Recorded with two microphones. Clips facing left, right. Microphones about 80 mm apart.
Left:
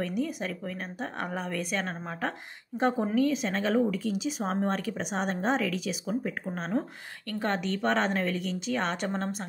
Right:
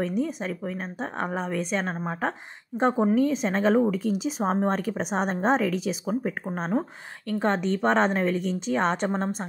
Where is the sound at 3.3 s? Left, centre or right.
Right.